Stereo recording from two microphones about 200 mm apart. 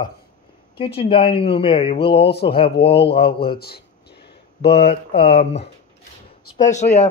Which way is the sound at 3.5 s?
50° left (ahead or behind).